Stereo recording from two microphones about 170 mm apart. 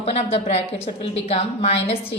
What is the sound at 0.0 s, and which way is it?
A woman's voice, 35° left (ahead or behind).